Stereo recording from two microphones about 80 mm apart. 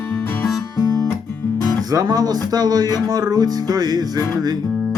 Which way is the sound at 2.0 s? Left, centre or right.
Right.